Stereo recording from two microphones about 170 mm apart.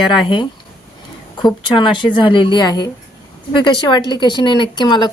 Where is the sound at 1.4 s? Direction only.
25° left (ahead or behind).